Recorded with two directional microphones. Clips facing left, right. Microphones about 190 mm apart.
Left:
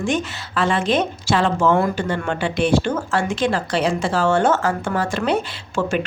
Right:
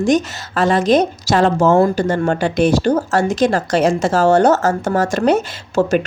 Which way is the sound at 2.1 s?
40° right (ahead or behind).